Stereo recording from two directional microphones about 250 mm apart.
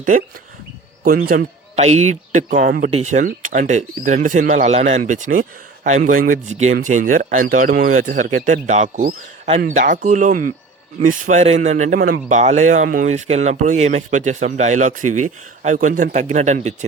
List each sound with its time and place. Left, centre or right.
1.0 s a man's voice: right